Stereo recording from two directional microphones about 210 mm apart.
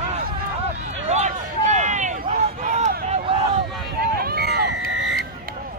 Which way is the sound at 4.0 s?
45° right (ahead or behind).